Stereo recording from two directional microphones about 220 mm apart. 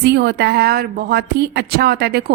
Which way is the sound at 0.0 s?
50° right (ahead or behind).